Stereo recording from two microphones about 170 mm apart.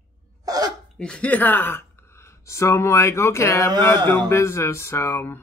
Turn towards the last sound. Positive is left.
turn(degrees=15)  # may be behind; listen again after turning